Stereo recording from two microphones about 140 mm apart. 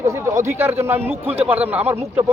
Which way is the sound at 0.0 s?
20° right (ahead or behind).